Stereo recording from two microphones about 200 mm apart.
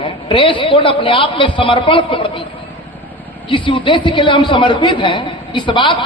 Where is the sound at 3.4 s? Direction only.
25° left (ahead or behind).